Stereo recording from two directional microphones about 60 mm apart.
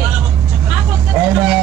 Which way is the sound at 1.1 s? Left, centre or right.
Centre.